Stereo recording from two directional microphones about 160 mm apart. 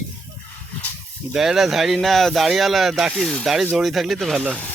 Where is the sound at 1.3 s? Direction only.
5° right (ahead or behind).